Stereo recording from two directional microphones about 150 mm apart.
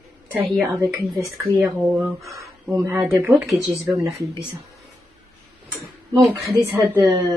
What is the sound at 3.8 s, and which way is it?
Speech, 20° right (ahead or behind).